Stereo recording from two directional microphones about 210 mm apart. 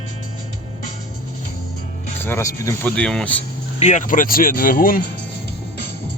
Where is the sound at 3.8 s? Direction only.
35° left (ahead or behind).